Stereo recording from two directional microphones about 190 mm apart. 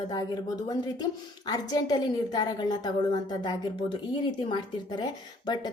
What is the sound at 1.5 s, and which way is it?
A woman's voice, 20° left (ahead or behind).